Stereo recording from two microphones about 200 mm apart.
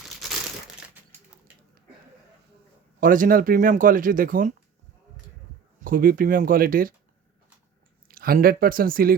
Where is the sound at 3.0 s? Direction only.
45° right (ahead or behind).